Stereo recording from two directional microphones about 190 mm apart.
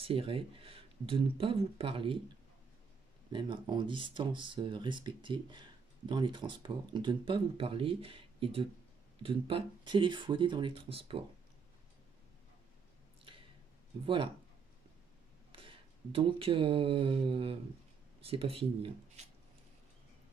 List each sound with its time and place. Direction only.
0.0 s speech: 30° right (ahead or behind)
3.3 s speech: 25° right (ahead or behind)
14.0 s speech: 30° right (ahead or behind)
15.5 s speech: 30° right (ahead or behind)